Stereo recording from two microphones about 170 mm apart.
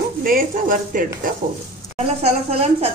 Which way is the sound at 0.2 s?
55° right (ahead or behind).